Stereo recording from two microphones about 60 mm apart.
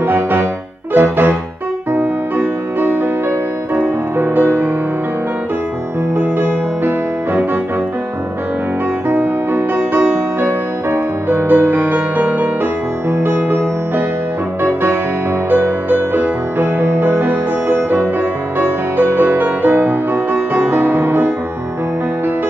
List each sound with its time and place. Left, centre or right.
0.0 s music: right
6.1 s music: right
9.1 s music: right
15.5 s music: right